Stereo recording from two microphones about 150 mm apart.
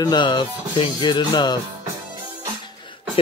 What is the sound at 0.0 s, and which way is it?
Speech, 30° left (ahead or behind).